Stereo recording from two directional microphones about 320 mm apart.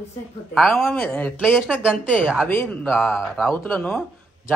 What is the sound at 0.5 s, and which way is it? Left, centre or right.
Speech, centre.